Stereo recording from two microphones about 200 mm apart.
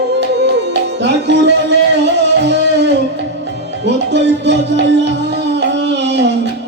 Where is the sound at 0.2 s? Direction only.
60° right (ahead or behind).